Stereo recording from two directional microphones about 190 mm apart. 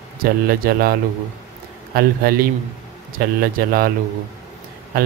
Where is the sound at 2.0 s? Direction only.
55° right (ahead or behind).